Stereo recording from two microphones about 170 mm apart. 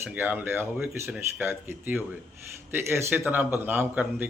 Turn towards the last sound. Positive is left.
turn(degrees=-10)  # may be behind; listen again after turning